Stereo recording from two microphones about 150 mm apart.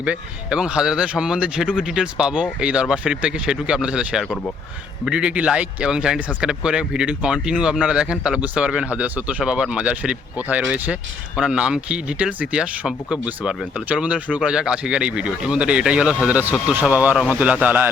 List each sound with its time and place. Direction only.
0.0 s speech: 5° right (ahead or behind)